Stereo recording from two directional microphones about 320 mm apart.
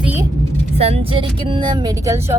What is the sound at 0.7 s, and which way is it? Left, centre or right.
Speech, centre.